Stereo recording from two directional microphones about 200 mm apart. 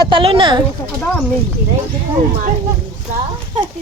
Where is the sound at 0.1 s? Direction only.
25° right (ahead or behind).